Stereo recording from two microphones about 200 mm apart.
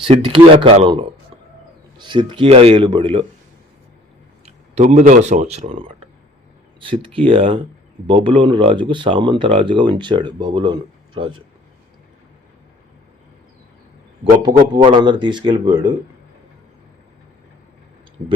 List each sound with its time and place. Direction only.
0.1 s speech: 25° right (ahead or behind)
4.4 s speech: 35° right (ahead or behind)
7.0 s speech: 25° right (ahead or behind)
14.4 s speech: 20° right (ahead or behind)